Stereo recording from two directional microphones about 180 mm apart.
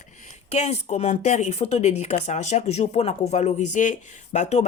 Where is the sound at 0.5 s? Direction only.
40° left (ahead or behind).